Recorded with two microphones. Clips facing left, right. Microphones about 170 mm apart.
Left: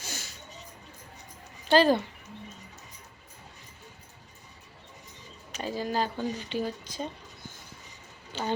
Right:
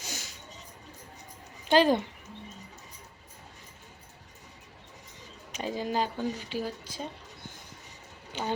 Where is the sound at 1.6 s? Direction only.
15° right (ahead or behind).